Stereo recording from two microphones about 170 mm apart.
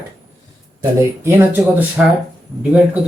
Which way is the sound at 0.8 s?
15° right (ahead or behind).